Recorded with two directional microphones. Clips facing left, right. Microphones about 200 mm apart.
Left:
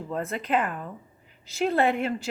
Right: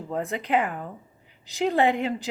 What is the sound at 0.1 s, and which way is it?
A woman's voice, 15° right (ahead or behind).